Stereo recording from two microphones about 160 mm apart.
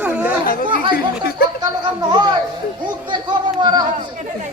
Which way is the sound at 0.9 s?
70° left (ahead or behind).